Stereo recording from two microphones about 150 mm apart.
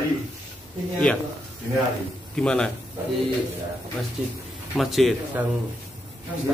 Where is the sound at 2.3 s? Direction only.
5° left (ahead or behind).